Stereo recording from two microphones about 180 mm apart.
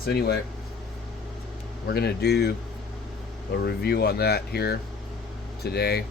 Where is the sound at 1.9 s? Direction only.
65° left (ahead or behind).